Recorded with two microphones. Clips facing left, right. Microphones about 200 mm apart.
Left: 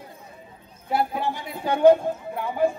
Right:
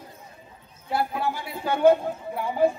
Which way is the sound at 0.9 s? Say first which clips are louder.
Left 1 dB; 20° left (ahead or behind).